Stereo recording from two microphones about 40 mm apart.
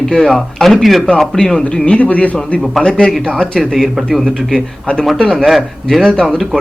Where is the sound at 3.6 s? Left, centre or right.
Centre.